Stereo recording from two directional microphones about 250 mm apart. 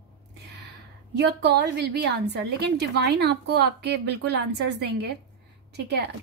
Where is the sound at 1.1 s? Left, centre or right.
Right.